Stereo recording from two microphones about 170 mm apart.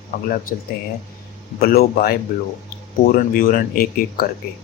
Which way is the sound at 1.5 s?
65° left (ahead or behind).